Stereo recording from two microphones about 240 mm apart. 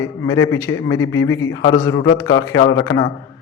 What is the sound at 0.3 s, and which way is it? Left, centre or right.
A man's voice, centre.